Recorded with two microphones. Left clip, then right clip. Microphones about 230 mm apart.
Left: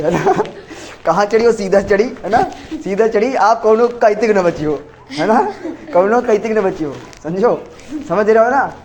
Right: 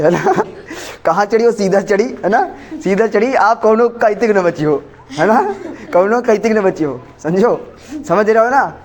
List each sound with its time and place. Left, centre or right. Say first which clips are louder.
0.0 s speech: right 2 dB; right